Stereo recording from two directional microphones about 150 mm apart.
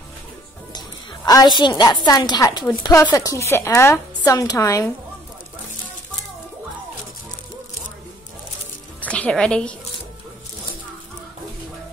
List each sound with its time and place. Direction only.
0.7 s a sound: 25° left (ahead or behind)
1.8 s speech: 25° left (ahead or behind)
9.0 s a woman's voice: 10° left (ahead or behind)